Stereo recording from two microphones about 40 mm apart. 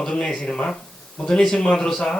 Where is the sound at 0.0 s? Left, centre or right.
Centre.